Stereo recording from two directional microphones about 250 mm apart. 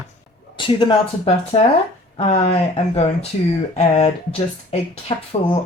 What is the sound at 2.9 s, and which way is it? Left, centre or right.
Speech, left.